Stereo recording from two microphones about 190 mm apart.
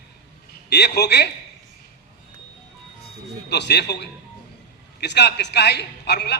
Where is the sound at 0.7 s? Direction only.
60° left (ahead or behind).